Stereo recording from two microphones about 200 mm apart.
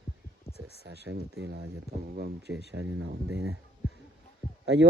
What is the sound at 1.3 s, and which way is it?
Speech, 65° right (ahead or behind).